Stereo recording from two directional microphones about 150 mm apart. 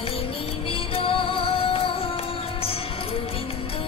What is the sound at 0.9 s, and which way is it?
Music, 35° left (ahead or behind).